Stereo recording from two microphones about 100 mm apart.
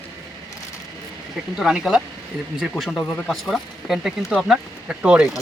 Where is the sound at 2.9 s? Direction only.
10° left (ahead or behind).